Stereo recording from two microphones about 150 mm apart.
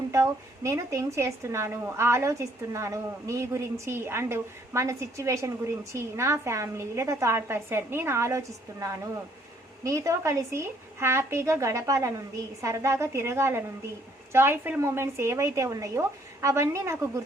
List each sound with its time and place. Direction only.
0.1 s a woman's voice: 20° right (ahead or behind)